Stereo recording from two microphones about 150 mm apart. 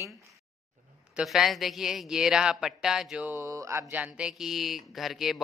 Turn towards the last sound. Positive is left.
turn(degrees=0)  # may be behind; listen again after turning